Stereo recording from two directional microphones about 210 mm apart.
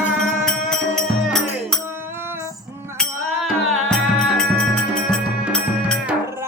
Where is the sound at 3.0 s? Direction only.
5° left (ahead or behind).